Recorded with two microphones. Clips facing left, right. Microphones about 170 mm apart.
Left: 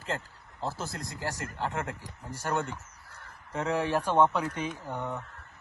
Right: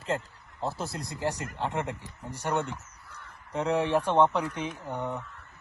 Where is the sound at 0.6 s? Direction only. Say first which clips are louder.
Right 2 dB; 20° right (ahead or behind).